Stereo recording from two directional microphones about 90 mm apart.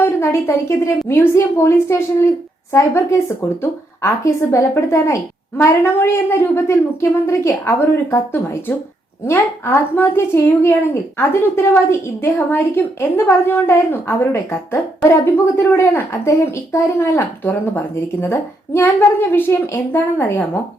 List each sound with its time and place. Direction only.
0.0 s a woman's voice: 30° left (ahead or behind)